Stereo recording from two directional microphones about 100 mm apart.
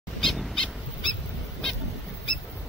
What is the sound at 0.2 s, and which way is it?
Owl, 5° left (ahead or behind).